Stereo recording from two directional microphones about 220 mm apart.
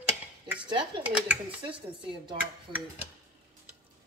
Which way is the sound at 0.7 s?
20° right (ahead or behind).